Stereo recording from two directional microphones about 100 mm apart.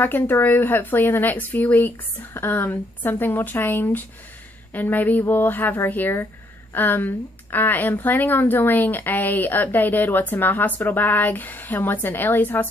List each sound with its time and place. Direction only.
0.0 s a woman's voice: 20° left (ahead or behind)